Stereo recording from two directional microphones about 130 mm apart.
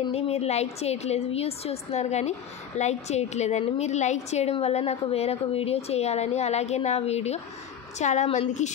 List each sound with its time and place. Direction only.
0.1 s a woman's voice: 50° left (ahead or behind)